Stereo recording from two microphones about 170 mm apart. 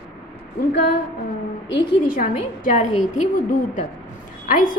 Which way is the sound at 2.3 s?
40° left (ahead or behind).